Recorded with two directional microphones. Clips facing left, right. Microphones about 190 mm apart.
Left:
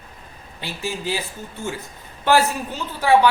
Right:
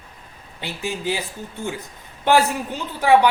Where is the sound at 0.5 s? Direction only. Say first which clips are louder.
Right 1 dB; 20° right (ahead or behind).